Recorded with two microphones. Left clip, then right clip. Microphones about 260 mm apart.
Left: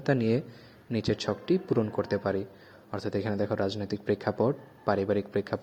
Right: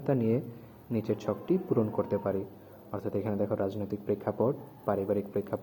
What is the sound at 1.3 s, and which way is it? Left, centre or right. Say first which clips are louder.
Speech: left 1 dB; left.